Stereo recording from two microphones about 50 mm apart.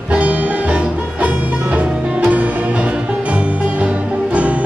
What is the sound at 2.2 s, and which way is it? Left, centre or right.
Music, right.